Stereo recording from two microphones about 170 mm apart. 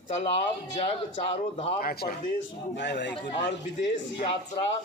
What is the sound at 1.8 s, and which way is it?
Speech, 65° left (ahead or behind).